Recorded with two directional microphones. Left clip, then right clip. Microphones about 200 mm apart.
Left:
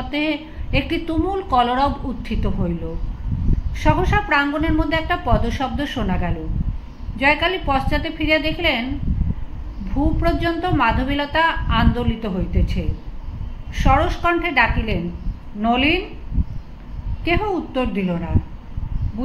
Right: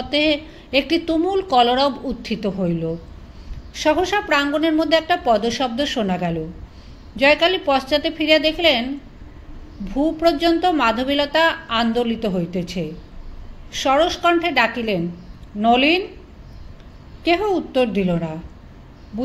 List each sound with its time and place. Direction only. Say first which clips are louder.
0.1 s a woman's voice: right 5 dB; 45° right (ahead or behind)
10.2 s a woman's voice: right 6 dB; 40° right (ahead or behind)
17.2 s a woman's voice: right 2 dB; 45° right (ahead or behind)